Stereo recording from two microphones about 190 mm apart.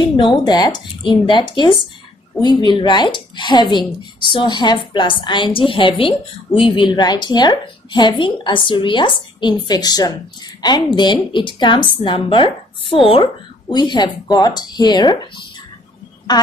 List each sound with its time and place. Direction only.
0.2 s a woman's voice: 20° left (ahead or behind)